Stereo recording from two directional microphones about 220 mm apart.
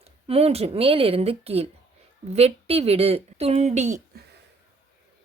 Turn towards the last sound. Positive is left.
turn(degrees=-30)  # may be behind; listen again after turning